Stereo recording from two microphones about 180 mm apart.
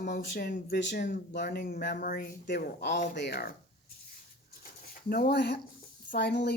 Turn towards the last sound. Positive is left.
turn(degrees=70)  # may be behind; listen again after turning